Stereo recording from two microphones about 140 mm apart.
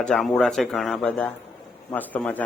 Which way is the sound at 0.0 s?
Centre (ahead or behind).